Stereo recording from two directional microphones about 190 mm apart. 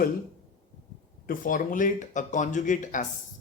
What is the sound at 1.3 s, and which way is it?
Speech, 45° left (ahead or behind).